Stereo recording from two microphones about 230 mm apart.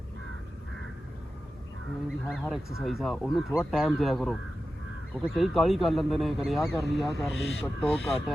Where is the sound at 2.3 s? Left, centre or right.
Centre.